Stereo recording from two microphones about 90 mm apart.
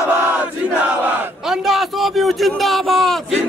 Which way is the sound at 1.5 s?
Centre (ahead or behind).